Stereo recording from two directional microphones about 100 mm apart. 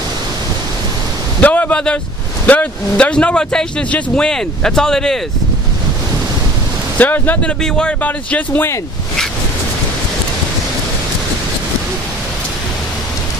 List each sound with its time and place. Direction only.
1.4 s speech: 15° left (ahead or behind)
7.0 s speech: 15° left (ahead or behind)